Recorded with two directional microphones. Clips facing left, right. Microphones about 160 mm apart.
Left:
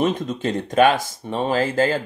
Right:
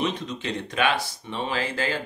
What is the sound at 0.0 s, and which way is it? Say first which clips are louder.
Speech: left 7 dB; 50° left (ahead or behind).